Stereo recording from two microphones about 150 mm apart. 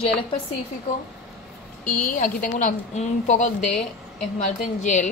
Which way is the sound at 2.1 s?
60° left (ahead or behind).